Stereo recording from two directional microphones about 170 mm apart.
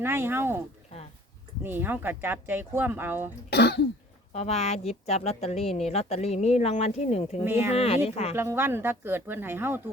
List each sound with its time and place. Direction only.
0.0 s speech: 15° right (ahead or behind)
1.6 s speech: 10° right (ahead or behind)
3.5 s throat clearing: 75° left (ahead or behind)
4.3 s speech: 40° left (ahead or behind)
7.4 s speech: 15° right (ahead or behind)
7.7 s speech: 35° left (ahead or behind)
8.4 s speech: 15° right (ahead or behind)